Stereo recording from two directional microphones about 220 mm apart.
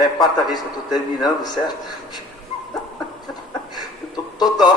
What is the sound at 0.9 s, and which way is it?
Speech, 20° left (ahead or behind).